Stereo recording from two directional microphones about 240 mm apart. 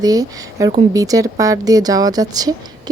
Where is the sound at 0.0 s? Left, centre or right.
Centre.